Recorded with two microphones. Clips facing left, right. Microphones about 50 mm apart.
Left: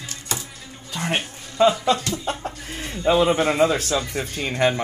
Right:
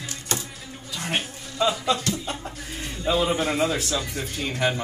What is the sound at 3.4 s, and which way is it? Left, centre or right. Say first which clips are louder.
A man's voice: left 5 dB; centre.